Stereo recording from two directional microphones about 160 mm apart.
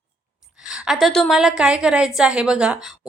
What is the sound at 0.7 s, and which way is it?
Speech, centre (ahead or behind).